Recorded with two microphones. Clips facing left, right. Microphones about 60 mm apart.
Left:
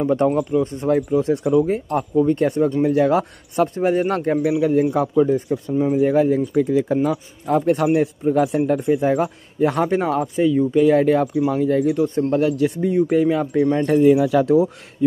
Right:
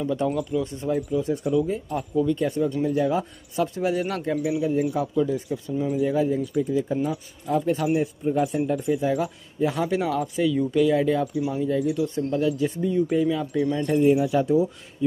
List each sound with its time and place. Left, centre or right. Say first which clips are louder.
0.0 s speech: left 7 dB; left
0.8 s speech: left 6 dB; left
2.8 s speech: left 7 dB; left
3.6 s speech: left 6 dB; left
5.1 s speech: left 7 dB; left
6.5 s speech: left 6 dB; left
7.1 s speech: left 6 dB; left
8.5 s speech: left 6 dB; left
8.8 s speech: left 5 dB; left
10.9 s speech: left 6 dB; left
11.9 s speech: left 6 dB; left
13.8 s speech: left 4 dB; left
15.0 s speech: left 6 dB; left